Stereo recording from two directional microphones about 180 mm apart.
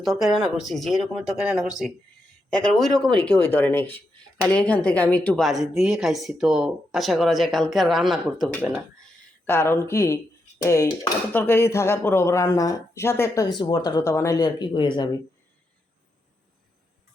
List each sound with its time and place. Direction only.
0.0 s a woman's voice: centre (ahead or behind)
9.5 s speech: 15° left (ahead or behind)